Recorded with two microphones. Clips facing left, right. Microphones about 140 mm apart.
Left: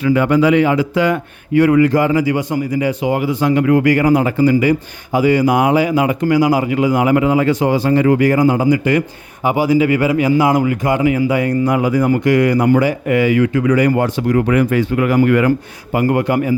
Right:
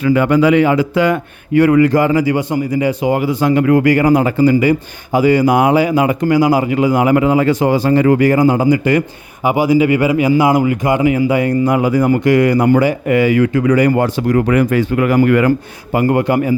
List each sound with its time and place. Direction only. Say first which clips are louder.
0.0 s a man's voice: right 1 dB; 50° right (ahead or behind); by 2.9 s 25° right (ahead or behind)
3.0 s a man's voice: right 2 dB; 40° right (ahead or behind)
3.8 s a man's voice: right 1 dB; 30° right (ahead or behind)
8.2 s speech: right 1 dB; 30° right (ahead or behind)
9.4 s a man's voice: right 2 dB; 10° right (ahead or behind); by 15.5 s 55° right (ahead or behind)
15.9 s a man's voice: right 2 dB; 30° right (ahead or behind)